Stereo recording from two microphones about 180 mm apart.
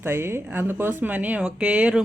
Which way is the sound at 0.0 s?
15° right (ahead or behind).